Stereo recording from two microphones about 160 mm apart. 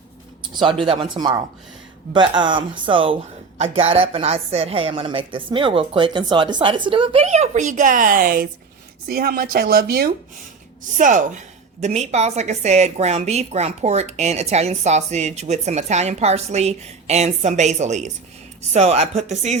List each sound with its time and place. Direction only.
0.5 s a woman's voice: 30° right (ahead or behind); by 10.1 s 75° right (ahead or behind)
10.9 s a woman's voice: 55° right (ahead or behind)